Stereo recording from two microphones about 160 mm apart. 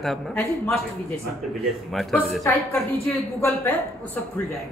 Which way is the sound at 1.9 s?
Centre (ahead or behind).